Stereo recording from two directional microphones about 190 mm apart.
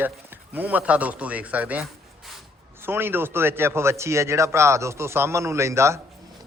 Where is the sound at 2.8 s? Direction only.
10° right (ahead or behind).